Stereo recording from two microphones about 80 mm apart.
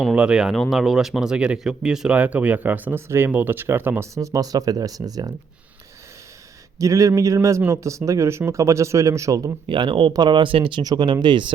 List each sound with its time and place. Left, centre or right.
0.1 s speech: centre; by 4.0 s right
4.0 s speech: right
6.7 s speech: right
9.6 s speech: right
10.1 s speech: right
10.8 s speech: right